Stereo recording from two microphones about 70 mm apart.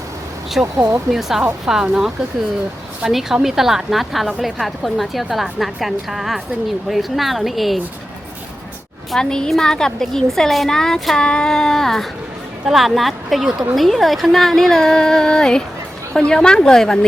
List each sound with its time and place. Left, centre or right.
0.8 s speech: right
1.1 s a woman's voice: centre
9.1 s a woman's voice: centre